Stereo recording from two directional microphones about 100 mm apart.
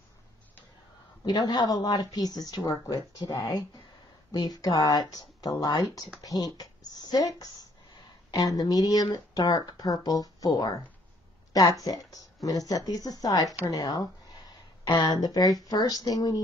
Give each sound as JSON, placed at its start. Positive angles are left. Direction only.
{"t": 1.2, "sound": "speech", "side_deg": 45}
{"t": 11.8, "sound": "speech", "side_deg": 40}